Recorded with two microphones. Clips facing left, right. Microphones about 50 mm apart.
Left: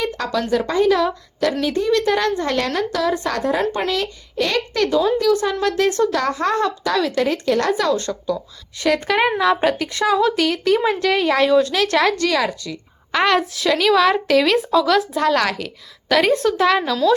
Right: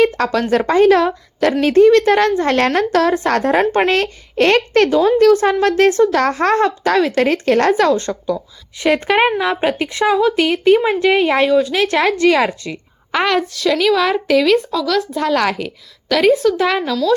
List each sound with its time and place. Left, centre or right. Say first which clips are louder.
0.0 s speech: right 7 dB; right
0.5 s a woman's voice: right 5 dB; right
2.6 s a child's voice: right 6 dB; right
3.9 s a child's voice: right 6 dB; right
4.9 s a woman's voice: right 4 dB; right
5.1 s a woman's voice: right 6 dB; right
9.4 s a woman's voice: even; centre
10.2 s speech: right 2 dB; centre
10.4 s a woman's voice: right 4 dB; right
11.4 s a woman's voice: right 2 dB; centre; by 12.8 s right
13.2 s speech: even; centre
15.4 s speech: right 4 dB; centre
16.0 s speech: right 3 dB; centre